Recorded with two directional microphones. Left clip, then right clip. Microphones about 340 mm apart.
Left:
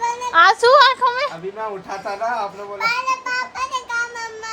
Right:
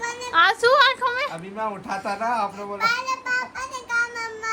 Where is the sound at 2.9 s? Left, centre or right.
Centre.